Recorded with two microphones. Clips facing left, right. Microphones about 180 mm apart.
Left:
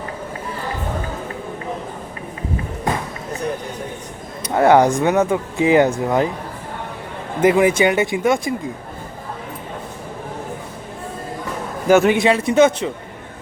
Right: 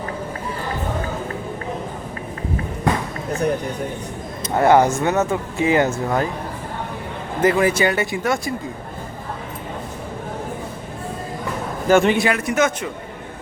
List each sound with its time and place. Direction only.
4.4 s speech: 15° left (ahead or behind)
7.4 s a man's voice: 15° left (ahead or behind)
11.9 s a man's voice: 5° left (ahead or behind)
12.1 s a man's voice: 25° left (ahead or behind)